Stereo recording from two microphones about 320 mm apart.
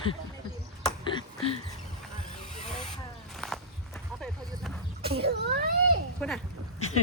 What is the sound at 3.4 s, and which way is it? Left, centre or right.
Walk, centre.